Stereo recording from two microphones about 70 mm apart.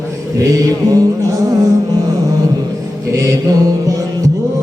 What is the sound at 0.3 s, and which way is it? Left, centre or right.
Mantra, right.